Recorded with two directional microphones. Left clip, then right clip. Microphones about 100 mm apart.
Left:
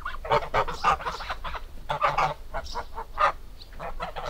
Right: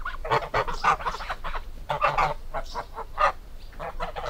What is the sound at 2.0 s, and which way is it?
Goose, 15° right (ahead or behind).